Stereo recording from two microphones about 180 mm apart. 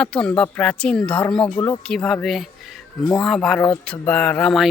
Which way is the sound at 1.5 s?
15° left (ahead or behind).